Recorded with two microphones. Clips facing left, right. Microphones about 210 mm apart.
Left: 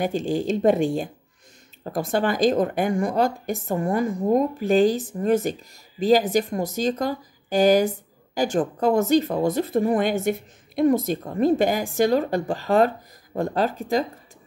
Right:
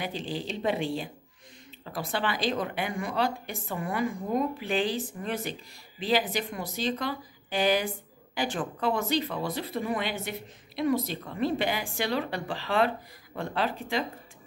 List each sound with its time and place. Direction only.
0.0 s speech: 45° left (ahead or behind)